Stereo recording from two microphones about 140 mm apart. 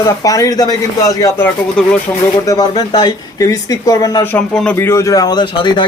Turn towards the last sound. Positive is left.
turn(degrees=35)  # may be behind; listen again after turning